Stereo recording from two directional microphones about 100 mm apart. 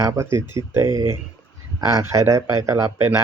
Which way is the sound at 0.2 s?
30° right (ahead or behind).